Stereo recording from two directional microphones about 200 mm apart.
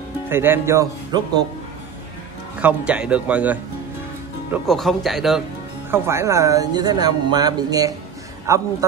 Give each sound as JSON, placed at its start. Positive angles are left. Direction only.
{"t": 0.3, "sound": "speech", "side_deg": -10}
{"t": 2.6, "sound": "speech", "side_deg": -5}
{"t": 5.9, "sound": "speech", "side_deg": -15}